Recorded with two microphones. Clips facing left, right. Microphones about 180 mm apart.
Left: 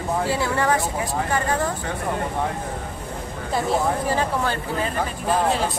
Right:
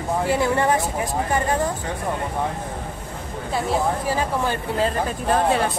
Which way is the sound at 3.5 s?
Centre (ahead or behind).